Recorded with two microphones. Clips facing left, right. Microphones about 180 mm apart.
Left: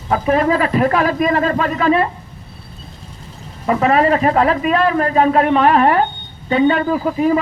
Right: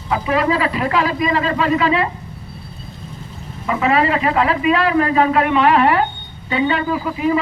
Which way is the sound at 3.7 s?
45° left (ahead or behind).